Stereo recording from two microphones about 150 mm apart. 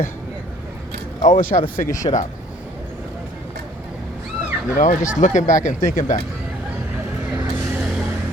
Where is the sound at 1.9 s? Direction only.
20° left (ahead or behind).